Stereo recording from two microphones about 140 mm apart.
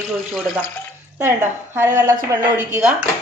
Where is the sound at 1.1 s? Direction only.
15° right (ahead or behind).